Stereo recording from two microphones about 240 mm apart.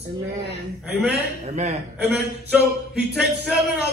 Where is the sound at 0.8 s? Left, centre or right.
Centre.